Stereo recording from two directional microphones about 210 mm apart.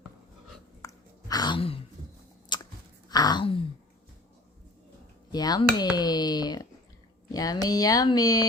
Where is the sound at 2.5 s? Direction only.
20° left (ahead or behind).